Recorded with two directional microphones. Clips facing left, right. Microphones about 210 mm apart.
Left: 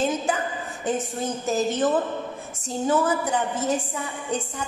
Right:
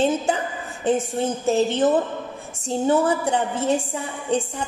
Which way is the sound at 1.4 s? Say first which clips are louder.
Right 4 dB; 30° right (ahead or behind).